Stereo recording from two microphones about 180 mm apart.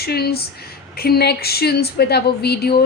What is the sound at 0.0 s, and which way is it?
A woman's voice, 60° left (ahead or behind).